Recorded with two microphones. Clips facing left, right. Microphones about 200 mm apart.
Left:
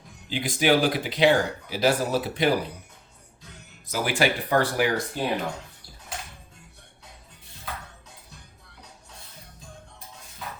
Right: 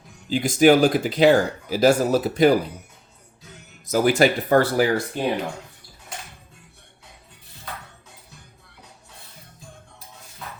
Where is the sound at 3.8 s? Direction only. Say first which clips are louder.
Right 7 dB; 45° right (ahead or behind).